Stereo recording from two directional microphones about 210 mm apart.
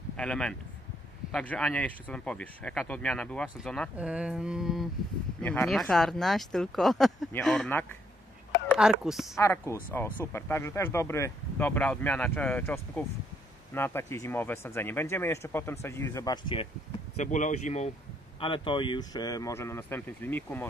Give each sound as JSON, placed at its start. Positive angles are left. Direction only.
{"t": 0.2, "sound": "speech", "side_deg": 5}
{"t": 9.4, "sound": "speech", "side_deg": 10}
{"t": 17.2, "sound": "speech", "side_deg": 35}
{"t": 18.4, "sound": "speech", "side_deg": 25}